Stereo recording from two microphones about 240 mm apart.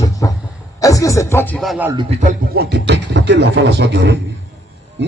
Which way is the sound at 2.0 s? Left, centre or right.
Right.